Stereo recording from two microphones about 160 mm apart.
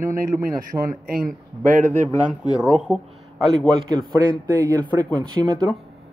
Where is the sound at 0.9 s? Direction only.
65° right (ahead or behind).